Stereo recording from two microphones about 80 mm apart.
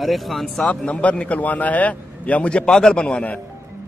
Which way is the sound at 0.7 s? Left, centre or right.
Centre.